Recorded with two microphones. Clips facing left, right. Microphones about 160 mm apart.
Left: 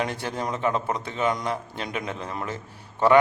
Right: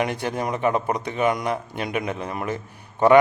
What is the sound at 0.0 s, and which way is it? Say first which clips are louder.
Speech: right 4 dB; 15° right (ahead or behind).